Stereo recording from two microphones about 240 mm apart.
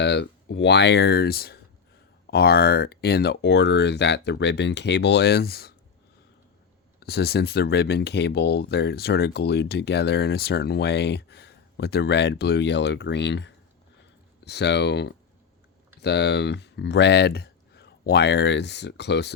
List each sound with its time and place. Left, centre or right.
0.0 s speech: left
7.0 s speech: left